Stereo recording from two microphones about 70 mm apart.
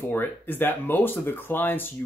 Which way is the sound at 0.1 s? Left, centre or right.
Left.